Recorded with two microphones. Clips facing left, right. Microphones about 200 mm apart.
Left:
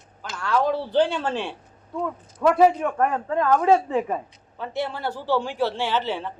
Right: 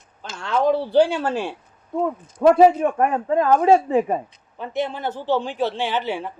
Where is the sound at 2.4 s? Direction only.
25° right (ahead or behind).